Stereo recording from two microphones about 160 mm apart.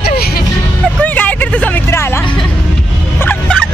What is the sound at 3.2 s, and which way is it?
Turkey, 10° left (ahead or behind).